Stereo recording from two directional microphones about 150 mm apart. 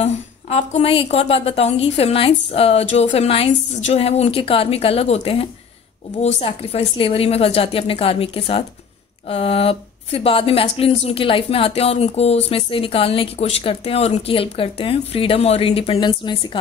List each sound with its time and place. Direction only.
0.0 s speech: 45° left (ahead or behind)